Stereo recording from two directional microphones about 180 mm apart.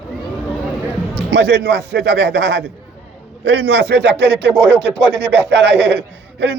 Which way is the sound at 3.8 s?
75° right (ahead or behind).